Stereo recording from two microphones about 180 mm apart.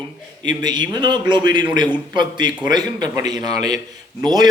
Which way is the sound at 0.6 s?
25° right (ahead or behind).